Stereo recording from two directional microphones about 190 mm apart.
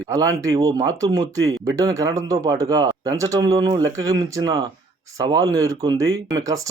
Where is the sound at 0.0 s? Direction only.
20° right (ahead or behind).